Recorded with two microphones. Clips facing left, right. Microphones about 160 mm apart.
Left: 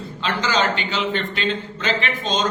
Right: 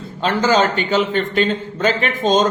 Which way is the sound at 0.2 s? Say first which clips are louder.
Right 6 dB; 45° right (ahead or behind).